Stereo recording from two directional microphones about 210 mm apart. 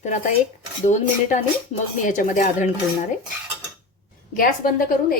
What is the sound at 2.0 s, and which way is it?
Speech, 40° left (ahead or behind).